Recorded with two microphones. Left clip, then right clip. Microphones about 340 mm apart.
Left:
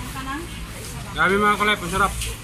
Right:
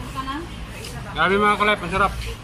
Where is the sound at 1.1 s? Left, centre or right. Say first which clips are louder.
Even; centre.